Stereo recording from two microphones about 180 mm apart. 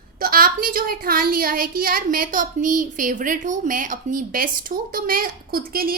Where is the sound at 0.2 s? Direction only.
55° right (ahead or behind).